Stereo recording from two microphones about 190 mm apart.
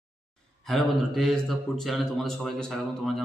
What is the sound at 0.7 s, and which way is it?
Speech, centre (ahead or behind).